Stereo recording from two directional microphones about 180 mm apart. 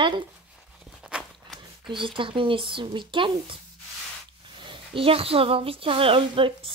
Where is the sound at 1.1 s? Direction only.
5° right (ahead or behind).